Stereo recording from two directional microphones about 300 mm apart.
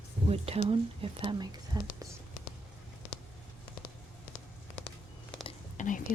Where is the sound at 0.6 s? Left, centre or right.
Centre.